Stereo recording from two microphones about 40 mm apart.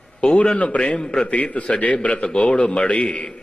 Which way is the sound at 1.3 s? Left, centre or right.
Left.